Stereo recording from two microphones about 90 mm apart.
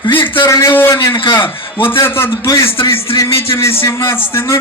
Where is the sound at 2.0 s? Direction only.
25° left (ahead or behind).